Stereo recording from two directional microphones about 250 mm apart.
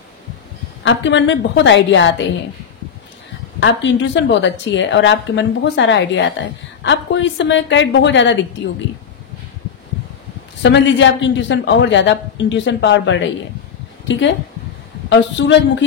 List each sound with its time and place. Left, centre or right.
0.8 s a woman's voice: left
3.5 s a woman's voice: left
10.6 s a woman's voice: left
15.0 s a woman's voice: left